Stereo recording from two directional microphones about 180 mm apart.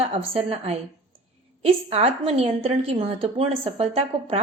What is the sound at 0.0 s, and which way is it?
A woman's voice, 35° right (ahead or behind).